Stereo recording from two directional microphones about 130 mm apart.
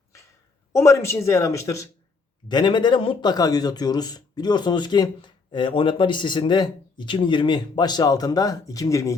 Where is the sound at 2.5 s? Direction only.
35° left (ahead or behind).